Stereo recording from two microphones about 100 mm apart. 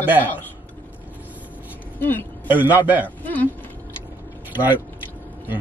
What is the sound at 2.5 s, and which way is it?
Speech, 20° right (ahead or behind).